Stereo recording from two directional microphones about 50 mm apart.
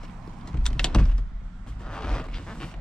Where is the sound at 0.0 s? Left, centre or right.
Centre.